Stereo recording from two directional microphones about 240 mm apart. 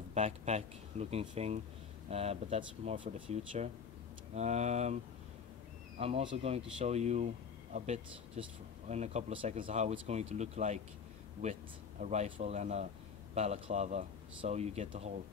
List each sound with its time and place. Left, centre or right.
0.1 s speech: right
5.9 s speech: right